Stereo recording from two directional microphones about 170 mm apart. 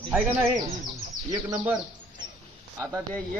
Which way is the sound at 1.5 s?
10° right (ahead or behind).